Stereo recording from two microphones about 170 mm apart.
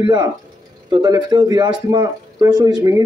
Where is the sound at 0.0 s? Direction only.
25° right (ahead or behind).